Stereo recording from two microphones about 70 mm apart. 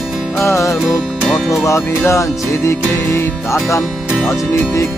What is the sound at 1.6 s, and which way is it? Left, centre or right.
Music, left.